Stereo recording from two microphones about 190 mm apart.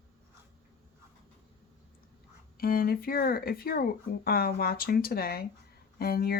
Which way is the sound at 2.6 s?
50° left (ahead or behind).